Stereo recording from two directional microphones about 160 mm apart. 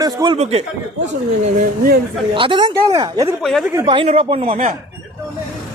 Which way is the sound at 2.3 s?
30° right (ahead or behind).